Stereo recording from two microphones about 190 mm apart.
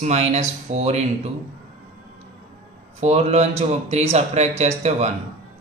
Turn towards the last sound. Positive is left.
turn(degrees=-35)  # may be behind; listen again after turning